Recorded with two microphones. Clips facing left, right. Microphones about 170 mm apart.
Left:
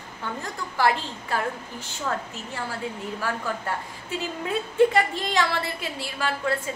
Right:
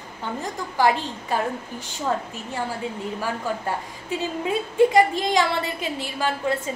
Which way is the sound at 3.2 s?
15° right (ahead or behind).